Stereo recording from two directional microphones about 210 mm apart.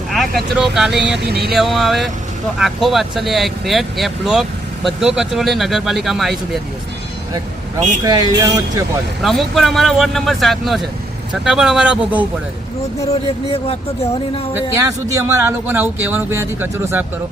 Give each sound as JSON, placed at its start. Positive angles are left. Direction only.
{"t": 0.1, "sound": "speech", "side_deg": 0}
{"t": 1.2, "sound": "speech", "side_deg": -50}
{"t": 1.5, "sound": "speech", "side_deg": 0}
{"t": 8.0, "sound": "a man's voice", "side_deg": -20}
{"t": 9.2, "sound": "speech", "side_deg": 0}
{"t": 13.1, "sound": "speech", "side_deg": 25}
{"t": 14.5, "sound": "a man's voice", "side_deg": -15}